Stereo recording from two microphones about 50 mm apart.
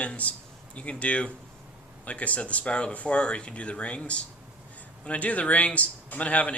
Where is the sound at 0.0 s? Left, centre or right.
Left.